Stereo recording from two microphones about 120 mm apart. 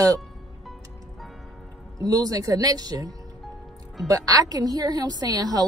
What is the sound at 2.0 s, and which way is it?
Speech, 30° right (ahead or behind).